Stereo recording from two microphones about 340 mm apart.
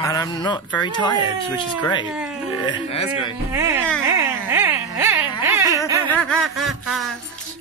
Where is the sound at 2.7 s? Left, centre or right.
Centre.